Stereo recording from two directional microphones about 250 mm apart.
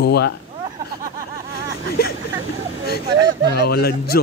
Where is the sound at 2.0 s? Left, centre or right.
Left.